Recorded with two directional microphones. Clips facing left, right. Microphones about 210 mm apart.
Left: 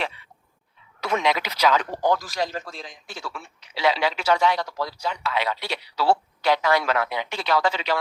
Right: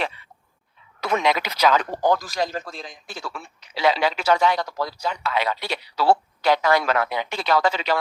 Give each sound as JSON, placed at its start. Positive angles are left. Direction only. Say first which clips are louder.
{"t": 1.0, "sound": "a man's voice", "louder": "right 2 dB", "side_deg": -45}